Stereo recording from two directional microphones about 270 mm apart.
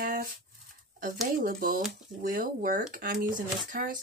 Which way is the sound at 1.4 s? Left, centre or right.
Right.